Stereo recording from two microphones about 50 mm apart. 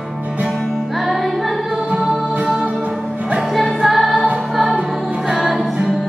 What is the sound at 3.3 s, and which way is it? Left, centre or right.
Music, centre.